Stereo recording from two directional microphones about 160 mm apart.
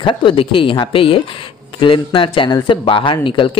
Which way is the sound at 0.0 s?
30° left (ahead or behind).